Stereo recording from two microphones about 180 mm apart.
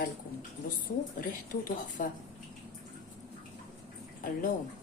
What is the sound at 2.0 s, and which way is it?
Speech, 45° left (ahead or behind).